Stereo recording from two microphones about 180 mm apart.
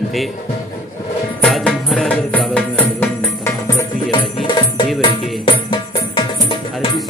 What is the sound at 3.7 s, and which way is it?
Music, 25° left (ahead or behind).